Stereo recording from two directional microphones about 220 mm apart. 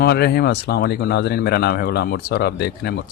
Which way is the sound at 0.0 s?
45° left (ahead or behind).